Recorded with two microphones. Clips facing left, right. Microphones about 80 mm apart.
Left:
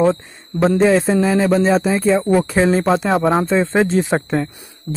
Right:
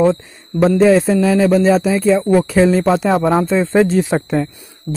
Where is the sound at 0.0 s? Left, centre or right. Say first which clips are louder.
Right 2 dB; centre.